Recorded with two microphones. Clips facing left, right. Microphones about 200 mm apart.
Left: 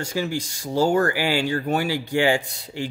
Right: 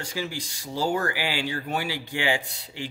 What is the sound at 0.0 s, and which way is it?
Speech, 50° left (ahead or behind).